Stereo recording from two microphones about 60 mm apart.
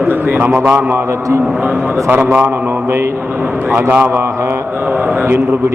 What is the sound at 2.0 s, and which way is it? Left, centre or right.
Speech, right.